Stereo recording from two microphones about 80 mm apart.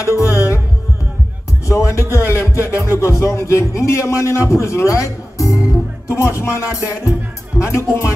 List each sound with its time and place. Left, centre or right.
0.0 s music: left
1.7 s music: left
2.1 s a man's voice: left